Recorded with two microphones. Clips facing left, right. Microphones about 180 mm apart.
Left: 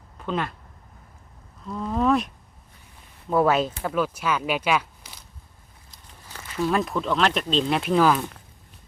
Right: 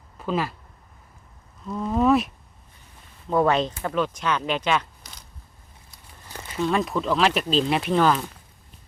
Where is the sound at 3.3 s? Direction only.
5° left (ahead or behind).